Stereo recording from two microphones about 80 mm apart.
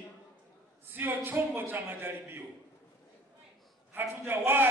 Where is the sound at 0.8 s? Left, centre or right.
Right.